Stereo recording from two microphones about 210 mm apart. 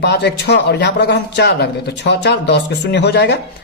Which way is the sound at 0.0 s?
55° left (ahead or behind).